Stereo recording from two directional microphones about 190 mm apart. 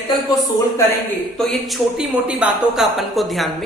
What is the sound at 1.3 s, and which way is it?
Speech, centre (ahead or behind).